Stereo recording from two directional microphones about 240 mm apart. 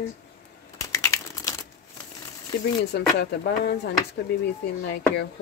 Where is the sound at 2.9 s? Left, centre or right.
Left.